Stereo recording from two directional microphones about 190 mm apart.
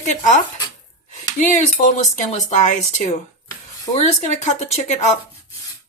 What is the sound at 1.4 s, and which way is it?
Speech, 40° left (ahead or behind).